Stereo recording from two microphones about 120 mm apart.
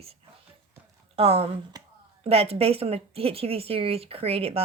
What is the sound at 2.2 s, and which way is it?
Speech, 55° right (ahead or behind).